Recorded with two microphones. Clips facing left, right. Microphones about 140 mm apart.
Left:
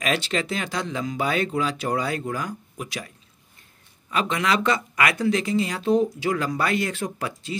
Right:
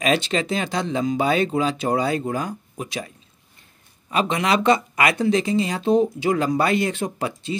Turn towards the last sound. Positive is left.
turn(degrees=-25)  # may be behind; listen again after turning